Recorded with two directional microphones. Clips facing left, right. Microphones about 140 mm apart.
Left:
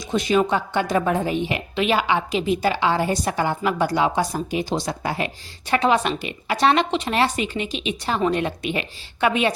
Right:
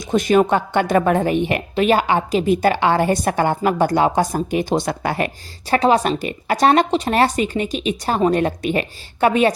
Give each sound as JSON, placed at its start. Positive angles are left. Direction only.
{"t": 0.0, "sound": "a woman's voice", "side_deg": -50}
{"t": 5.6, "sound": "a woman's voice", "side_deg": -35}